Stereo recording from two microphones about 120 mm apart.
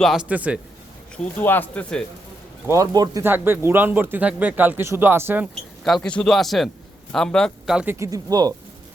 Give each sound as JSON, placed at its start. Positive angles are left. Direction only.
{"t": 0.0, "sound": "a man's voice", "side_deg": 0}
{"t": 0.3, "sound": "speech", "side_deg": -10}
{"t": 1.1, "sound": "speech", "side_deg": 10}
{"t": 2.6, "sound": "a man's voice", "side_deg": -30}
{"t": 3.2, "sound": "speech", "side_deg": -15}
{"t": 5.8, "sound": "a man's voice", "side_deg": 5}
{"t": 7.9, "sound": "speech", "side_deg": -25}